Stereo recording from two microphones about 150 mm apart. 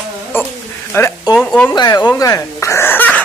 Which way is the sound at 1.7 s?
25° left (ahead or behind).